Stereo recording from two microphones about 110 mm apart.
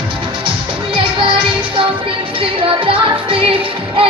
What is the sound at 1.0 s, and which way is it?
Music, 50° right (ahead or behind).